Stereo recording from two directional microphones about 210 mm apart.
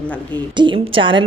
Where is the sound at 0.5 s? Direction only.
25° right (ahead or behind).